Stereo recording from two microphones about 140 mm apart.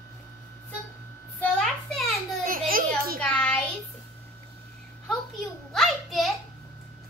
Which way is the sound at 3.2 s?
10° left (ahead or behind).